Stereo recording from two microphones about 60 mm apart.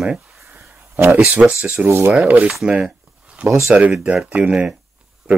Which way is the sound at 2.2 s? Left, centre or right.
Right.